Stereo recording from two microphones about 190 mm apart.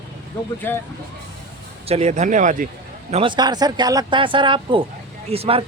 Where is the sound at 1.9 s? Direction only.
35° right (ahead or behind).